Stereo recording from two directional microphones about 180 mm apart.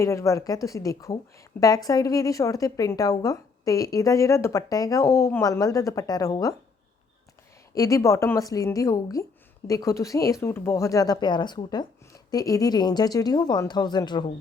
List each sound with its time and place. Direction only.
0.0 s a woman's voice: 15° left (ahead or behind)
7.7 s a woman's voice: 20° left (ahead or behind)